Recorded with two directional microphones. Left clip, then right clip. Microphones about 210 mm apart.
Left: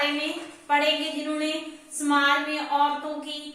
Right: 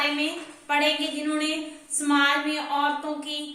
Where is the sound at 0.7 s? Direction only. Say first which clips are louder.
Left 1 dB; 30° right (ahead or behind).